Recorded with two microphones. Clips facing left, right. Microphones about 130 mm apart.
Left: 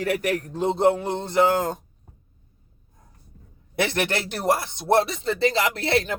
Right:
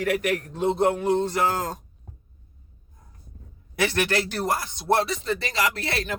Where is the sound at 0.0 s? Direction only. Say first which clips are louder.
Even; 35° left (ahead or behind).